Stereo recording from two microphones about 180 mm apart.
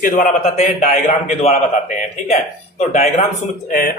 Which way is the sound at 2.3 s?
40° left (ahead or behind).